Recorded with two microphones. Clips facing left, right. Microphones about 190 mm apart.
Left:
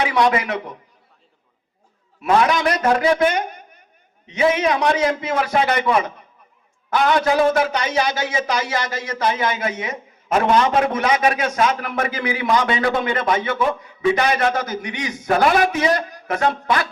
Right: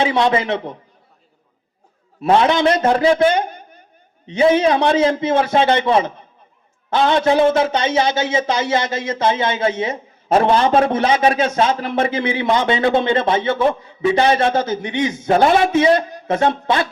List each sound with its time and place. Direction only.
0.0 s a man's voice: 25° right (ahead or behind)
2.2 s a man's voice: 25° right (ahead or behind)